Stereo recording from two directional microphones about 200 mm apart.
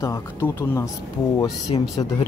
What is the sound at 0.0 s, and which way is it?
Speech, 15° left (ahead or behind).